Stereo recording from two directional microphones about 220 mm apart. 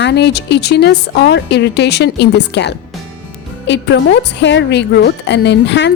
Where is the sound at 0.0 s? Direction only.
50° left (ahead or behind).